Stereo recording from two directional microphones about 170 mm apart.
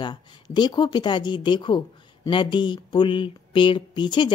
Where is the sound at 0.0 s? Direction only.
25° left (ahead or behind).